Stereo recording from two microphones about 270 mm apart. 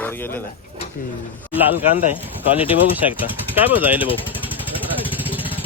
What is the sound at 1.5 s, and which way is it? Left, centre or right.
Speech, centre.